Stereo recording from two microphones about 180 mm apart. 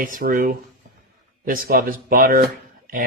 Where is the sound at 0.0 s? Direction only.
50° right (ahead or behind).